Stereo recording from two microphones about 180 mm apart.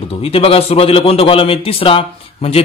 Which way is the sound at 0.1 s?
30° left (ahead or behind).